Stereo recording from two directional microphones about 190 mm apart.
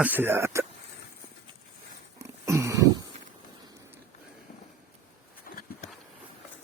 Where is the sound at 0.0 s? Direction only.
10° right (ahead or behind).